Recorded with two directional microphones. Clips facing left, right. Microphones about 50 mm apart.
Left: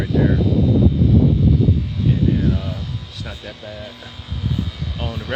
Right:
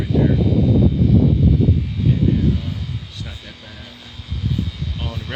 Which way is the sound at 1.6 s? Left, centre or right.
Centre.